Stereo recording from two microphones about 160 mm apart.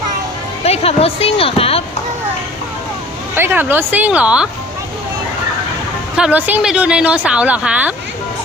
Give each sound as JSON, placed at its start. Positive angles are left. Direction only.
{"t": 0.6, "sound": "speech", "side_deg": 40}
{"t": 3.3, "sound": "a woman's voice", "side_deg": -15}
{"t": 6.1, "sound": "a woman's voice", "side_deg": -10}